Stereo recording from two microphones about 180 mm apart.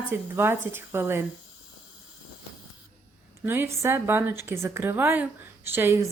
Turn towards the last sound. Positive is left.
turn(degrees=-15)  # may be behind; listen again after turning